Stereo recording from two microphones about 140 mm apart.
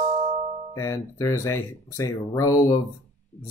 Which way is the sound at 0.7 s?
20° left (ahead or behind).